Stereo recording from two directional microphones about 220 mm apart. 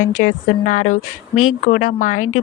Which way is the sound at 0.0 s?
35° left (ahead or behind).